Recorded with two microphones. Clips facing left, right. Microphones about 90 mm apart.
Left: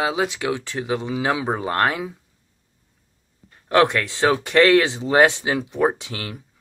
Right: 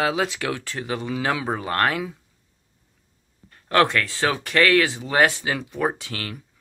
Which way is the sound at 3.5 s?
15° left (ahead or behind).